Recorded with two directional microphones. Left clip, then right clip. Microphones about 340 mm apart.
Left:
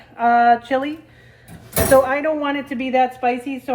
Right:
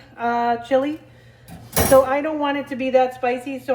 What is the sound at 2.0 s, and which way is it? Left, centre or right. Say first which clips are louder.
A woman's voice: left 1 dB; centre.